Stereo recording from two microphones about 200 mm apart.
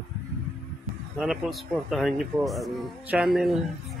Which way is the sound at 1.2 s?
Centre (ahead or behind).